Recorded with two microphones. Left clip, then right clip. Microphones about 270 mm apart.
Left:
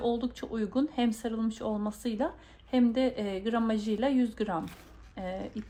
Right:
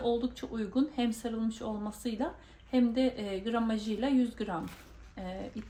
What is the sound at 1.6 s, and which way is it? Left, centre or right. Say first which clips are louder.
Speech: left 5 dB; left.